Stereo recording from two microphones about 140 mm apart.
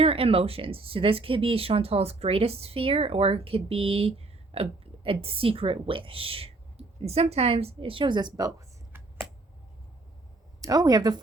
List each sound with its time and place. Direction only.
0.0 s a woman's voice: 45° right (ahead or behind); by 9.2 s 20° right (ahead or behind)
10.6 s speech: 25° right (ahead or behind)